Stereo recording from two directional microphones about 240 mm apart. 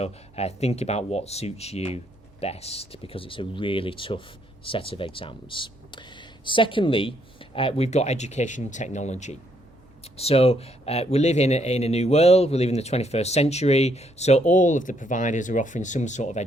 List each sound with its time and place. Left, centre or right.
0.0 s speech: left